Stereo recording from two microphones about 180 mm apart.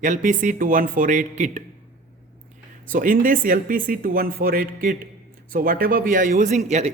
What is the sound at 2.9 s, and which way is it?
A man's voice, 50° right (ahead or behind).